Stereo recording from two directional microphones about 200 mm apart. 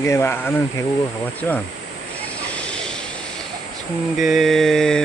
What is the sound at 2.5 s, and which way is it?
Vehicle, 5° left (ahead or behind).